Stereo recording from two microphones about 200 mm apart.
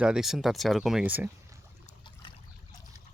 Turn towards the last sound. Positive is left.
turn(degrees=25)  # may be behind; listen again after turning